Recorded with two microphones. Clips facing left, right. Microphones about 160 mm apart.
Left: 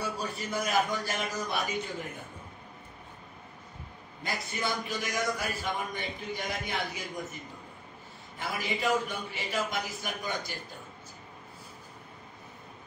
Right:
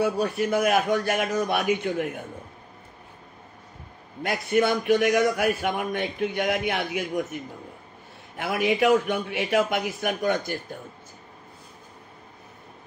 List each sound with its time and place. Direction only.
0.0 s a man's voice: 60° right (ahead or behind)
4.2 s a man's voice: 60° right (ahead or behind)
8.4 s a man's voice: 65° right (ahead or behind)